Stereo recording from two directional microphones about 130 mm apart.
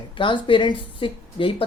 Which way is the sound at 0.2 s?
40° left (ahead or behind).